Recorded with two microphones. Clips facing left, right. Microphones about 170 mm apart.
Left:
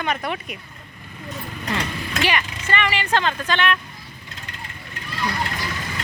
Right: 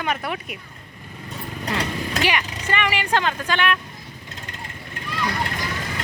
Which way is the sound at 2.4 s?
40° right (ahead or behind).